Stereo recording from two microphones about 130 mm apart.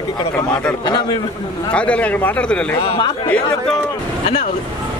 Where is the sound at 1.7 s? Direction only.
10° left (ahead or behind).